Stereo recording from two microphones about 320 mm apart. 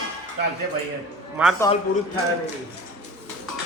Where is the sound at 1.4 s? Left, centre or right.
Centre.